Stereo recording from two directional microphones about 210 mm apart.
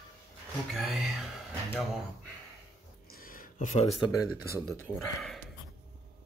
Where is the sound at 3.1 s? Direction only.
45° left (ahead or behind).